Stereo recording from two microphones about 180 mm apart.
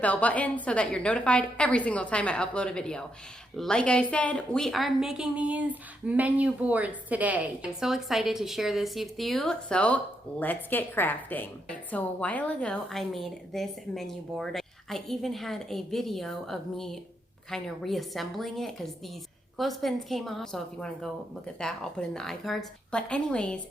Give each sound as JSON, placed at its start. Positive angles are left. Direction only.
{"t": 0.0, "sound": "a woman's voice", "side_deg": 10}